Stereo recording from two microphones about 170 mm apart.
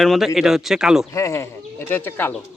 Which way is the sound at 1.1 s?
20° left (ahead or behind).